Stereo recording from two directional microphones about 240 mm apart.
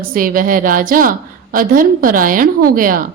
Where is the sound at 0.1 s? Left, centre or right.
Right.